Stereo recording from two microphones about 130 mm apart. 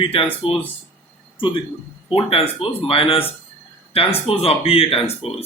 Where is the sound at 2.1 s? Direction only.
45° left (ahead or behind).